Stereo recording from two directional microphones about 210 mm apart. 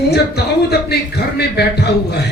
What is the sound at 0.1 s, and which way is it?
Speech, 50° left (ahead or behind).